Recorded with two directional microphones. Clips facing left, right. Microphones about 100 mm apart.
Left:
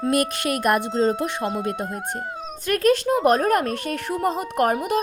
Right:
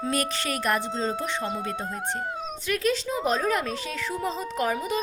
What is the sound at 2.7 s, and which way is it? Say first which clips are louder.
A woman's voice: left 8 dB; 55° left (ahead or behind).